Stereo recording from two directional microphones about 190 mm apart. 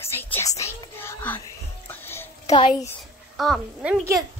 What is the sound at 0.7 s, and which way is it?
Speech, 10° left (ahead or behind).